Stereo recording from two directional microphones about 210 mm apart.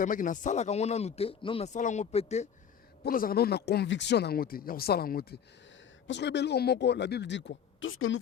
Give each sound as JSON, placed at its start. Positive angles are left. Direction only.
{"t": 0.0, "sound": "speech", "side_deg": 40}
{"t": 3.0, "sound": "speech", "side_deg": 45}